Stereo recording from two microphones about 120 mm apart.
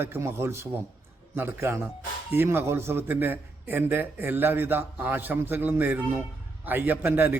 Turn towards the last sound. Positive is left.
turn(degrees=-15)  # may be behind; listen again after turning